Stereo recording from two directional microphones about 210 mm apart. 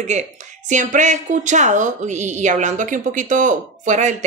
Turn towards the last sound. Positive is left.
turn(degrees=-35)  # may be behind; listen again after turning